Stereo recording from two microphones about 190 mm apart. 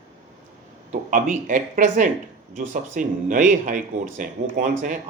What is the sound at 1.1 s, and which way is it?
Speech, 45° right (ahead or behind).